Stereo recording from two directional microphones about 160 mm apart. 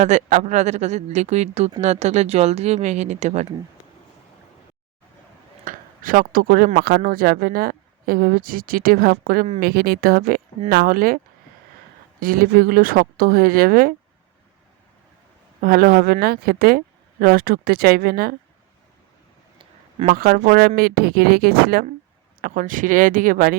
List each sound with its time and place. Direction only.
0.0 s speech: 50° right (ahead or behind)
5.6 s speech: 60° right (ahead or behind)
12.2 s speech: 65° right (ahead or behind)
15.6 s speech: 65° right (ahead or behind)
20.1 s speech: 65° right (ahead or behind)
22.4 s speech: 60° right (ahead or behind)